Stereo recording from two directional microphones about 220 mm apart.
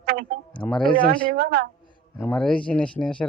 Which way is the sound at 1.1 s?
40° right (ahead or behind).